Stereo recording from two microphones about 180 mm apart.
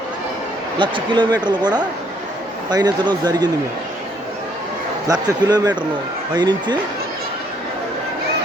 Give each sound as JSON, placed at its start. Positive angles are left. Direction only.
{"t": 0.8, "sound": "speech", "side_deg": -25}
{"t": 5.0, "sound": "speech", "side_deg": -20}